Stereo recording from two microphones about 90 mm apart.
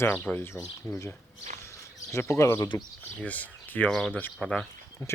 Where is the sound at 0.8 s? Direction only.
35° left (ahead or behind).